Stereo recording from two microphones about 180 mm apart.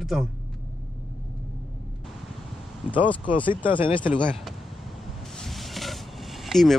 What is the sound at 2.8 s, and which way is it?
Speech, 25° left (ahead or behind).